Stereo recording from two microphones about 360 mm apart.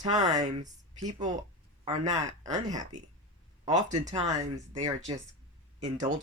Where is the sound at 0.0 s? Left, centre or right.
Centre.